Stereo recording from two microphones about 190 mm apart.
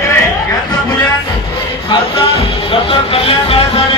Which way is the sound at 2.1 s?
25° left (ahead or behind).